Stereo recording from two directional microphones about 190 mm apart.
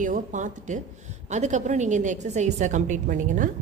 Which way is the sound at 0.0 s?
40° right (ahead or behind).